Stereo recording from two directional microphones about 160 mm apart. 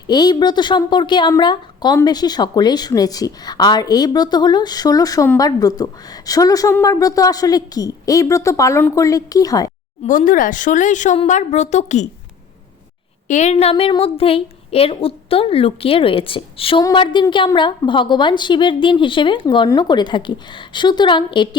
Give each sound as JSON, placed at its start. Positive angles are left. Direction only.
{"t": 0.1, "sound": "a woman's voice", "side_deg": 25}
{"t": 10.1, "sound": "a woman's voice", "side_deg": 55}
{"t": 13.2, "sound": "a woman's voice", "side_deg": 45}